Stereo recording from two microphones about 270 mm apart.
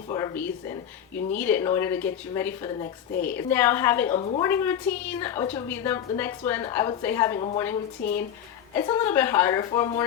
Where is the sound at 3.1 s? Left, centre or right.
Left.